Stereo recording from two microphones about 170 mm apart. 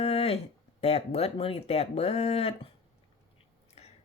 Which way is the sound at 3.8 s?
40° left (ahead or behind).